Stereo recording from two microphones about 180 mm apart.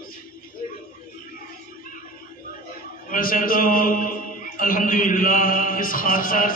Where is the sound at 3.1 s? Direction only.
50° left (ahead or behind).